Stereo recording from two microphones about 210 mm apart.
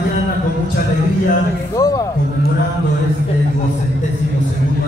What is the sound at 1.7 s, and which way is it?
Speech, 15° left (ahead or behind).